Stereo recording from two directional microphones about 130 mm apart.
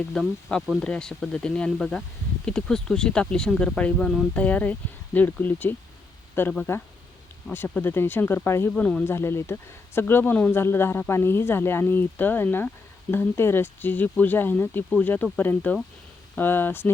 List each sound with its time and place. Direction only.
0.1 s speech: centre (ahead or behind)